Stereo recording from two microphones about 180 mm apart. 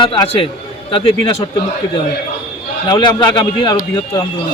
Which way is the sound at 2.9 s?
25° left (ahead or behind).